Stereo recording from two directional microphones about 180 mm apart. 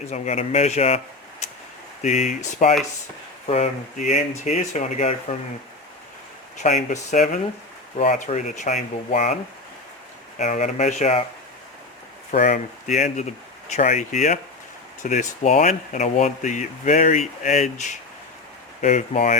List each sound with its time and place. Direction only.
0.1 s speech: 35° left (ahead or behind)
6.6 s speech: 40° left (ahead or behind)
12.3 s speech: 45° left (ahead or behind)